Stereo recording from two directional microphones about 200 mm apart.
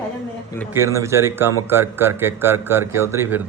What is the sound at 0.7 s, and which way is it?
A man's voice, 15° right (ahead or behind).